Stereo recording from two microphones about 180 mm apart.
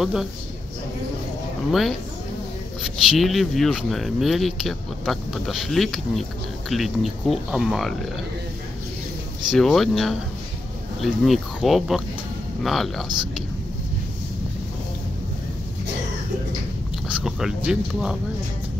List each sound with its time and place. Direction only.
0.0 s speech: centre (ahead or behind)
1.7 s speech: centre (ahead or behind)
9.5 s speech: centre (ahead or behind)
17.2 s speech: 5° right (ahead or behind)